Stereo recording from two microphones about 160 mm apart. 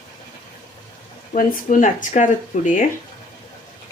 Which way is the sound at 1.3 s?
55° left (ahead or behind).